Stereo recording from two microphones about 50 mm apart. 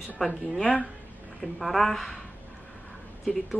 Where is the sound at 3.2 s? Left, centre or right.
Centre.